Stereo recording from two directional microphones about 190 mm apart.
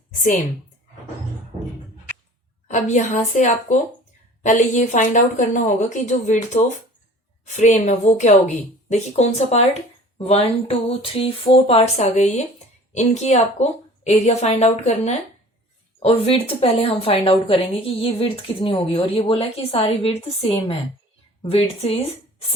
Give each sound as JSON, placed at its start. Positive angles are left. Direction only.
{"t": 2.6, "sound": "speech", "side_deg": 40}